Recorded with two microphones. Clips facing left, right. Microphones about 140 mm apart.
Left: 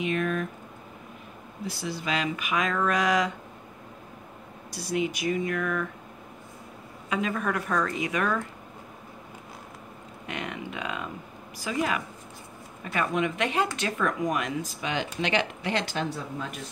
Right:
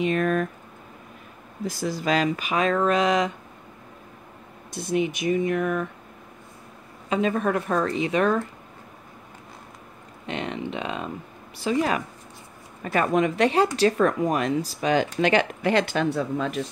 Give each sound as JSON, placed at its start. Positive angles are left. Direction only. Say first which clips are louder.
{"t": 0.0, "sound": "a sound", "louder": "right 5 dB", "side_deg": -40}
{"t": 1.7, "sound": "speech", "louder": "right 6 dB", "side_deg": -45}
{"t": 4.7, "sound": "speech", "louder": "right 4 dB", "side_deg": -20}
{"t": 7.1, "sound": "speech", "louder": "right 5 dB", "side_deg": -30}
{"t": 10.2, "sound": "speech", "louder": "right 5 dB", "side_deg": -25}
{"t": 12.9, "sound": "speech", "louder": "right 6 dB", "side_deg": -45}